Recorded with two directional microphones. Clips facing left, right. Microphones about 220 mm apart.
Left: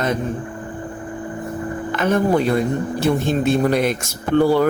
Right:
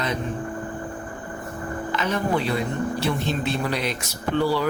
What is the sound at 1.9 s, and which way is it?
Speech, 50° left (ahead or behind).